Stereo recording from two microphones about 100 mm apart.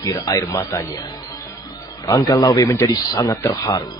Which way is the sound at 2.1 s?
40° left (ahead or behind).